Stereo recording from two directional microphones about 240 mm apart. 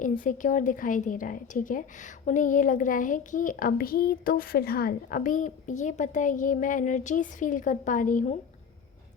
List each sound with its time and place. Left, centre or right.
0.0 s a woman's voice: left